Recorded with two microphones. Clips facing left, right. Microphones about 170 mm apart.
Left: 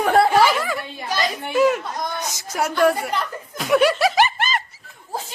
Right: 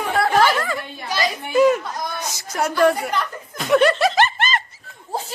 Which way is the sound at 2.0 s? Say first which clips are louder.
Left 1 dB; 15° left (ahead or behind).